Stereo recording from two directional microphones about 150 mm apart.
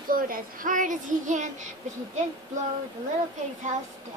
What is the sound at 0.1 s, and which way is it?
Child singing, 70° right (ahead or behind).